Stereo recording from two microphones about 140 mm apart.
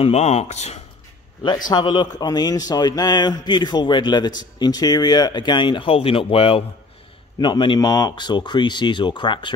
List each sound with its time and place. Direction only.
0.0 s speech: 50° left (ahead or behind)
1.7 s a man's voice: 30° left (ahead or behind)